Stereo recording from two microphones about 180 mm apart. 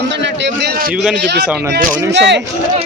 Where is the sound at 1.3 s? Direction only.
70° right (ahead or behind).